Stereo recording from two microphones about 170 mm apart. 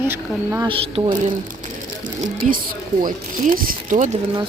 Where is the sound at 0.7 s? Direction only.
30° right (ahead or behind).